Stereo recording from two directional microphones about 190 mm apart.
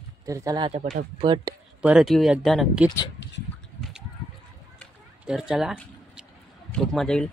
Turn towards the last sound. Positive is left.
turn(degrees=0)  # may be behind; listen again after turning